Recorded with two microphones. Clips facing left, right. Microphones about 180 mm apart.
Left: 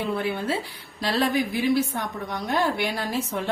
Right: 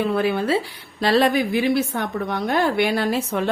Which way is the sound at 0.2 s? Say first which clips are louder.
Right 6 dB; 80° right.